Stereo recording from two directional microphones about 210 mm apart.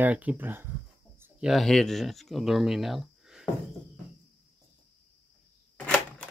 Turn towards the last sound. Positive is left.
turn(degrees=10)  # may be behind; listen again after turning